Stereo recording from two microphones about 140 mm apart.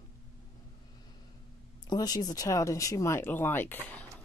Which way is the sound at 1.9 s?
30° left (ahead or behind).